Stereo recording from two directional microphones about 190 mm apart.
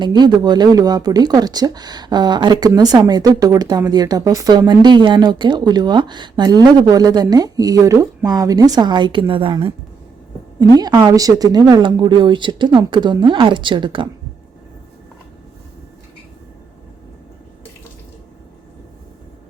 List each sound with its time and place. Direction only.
0.0 s speech: 25° right (ahead or behind)